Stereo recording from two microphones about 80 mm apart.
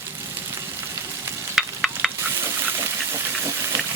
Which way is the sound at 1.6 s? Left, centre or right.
Centre.